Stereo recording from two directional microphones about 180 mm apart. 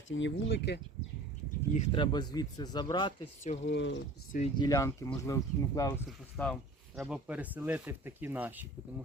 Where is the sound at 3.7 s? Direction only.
90° left.